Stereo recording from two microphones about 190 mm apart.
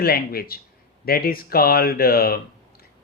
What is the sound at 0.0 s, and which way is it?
Speech, 55° left (ahead or behind).